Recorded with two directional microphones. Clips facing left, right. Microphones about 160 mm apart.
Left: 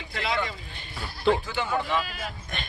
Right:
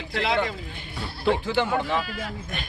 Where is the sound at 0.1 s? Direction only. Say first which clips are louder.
Right 4 dB; 75° right (ahead or behind).